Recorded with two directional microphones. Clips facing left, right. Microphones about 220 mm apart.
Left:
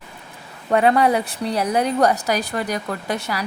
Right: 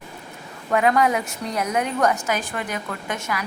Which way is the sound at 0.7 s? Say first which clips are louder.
Left 3 dB; 30° left (ahead or behind).